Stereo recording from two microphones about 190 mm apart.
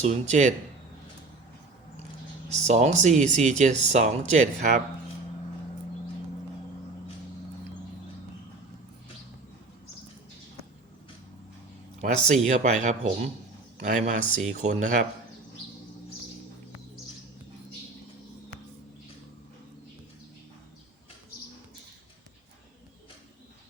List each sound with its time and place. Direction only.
0.0 s speech: 35° right (ahead or behind)
2.5 s speech: 40° right (ahead or behind)
12.0 s speech: 40° right (ahead or behind)